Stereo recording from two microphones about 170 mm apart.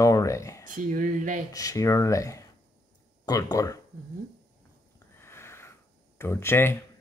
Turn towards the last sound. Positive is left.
turn(degrees=15)  # may be behind; listen again after turning